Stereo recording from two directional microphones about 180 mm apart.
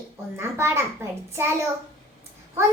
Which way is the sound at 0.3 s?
15° right (ahead or behind).